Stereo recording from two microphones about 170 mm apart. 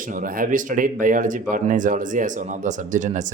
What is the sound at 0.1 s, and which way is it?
Speech, 55° right (ahead or behind).